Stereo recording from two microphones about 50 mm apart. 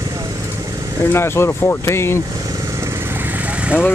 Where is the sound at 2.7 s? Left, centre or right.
Right.